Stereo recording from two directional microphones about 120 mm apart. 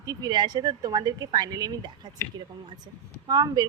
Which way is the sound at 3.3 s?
35° right (ahead or behind).